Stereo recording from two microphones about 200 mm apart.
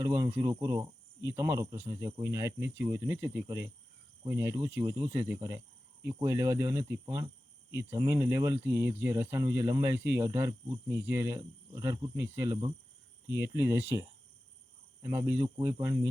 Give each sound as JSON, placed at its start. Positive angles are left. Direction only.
{"t": 0.0, "sound": "speech", "side_deg": -15}
{"t": 15.0, "sound": "speech", "side_deg": -20}